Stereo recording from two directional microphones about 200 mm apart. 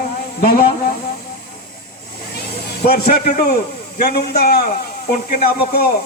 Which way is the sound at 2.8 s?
50° left (ahead or behind).